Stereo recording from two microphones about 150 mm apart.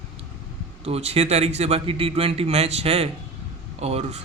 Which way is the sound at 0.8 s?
40° right (ahead or behind).